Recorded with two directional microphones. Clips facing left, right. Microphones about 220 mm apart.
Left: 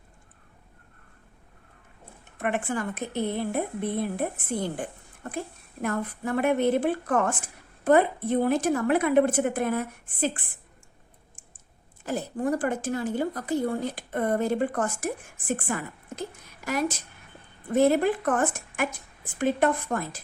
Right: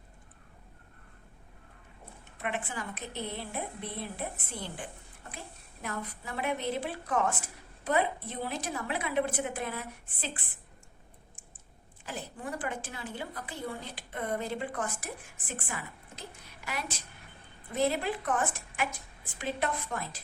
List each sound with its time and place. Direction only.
2.4 s a woman's voice: 50° left (ahead or behind)
12.0 s a woman's voice: 45° left (ahead or behind)
17.7 s a woman's voice: 50° left (ahead or behind)